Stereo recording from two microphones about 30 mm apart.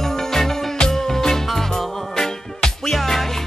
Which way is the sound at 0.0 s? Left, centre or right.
Centre.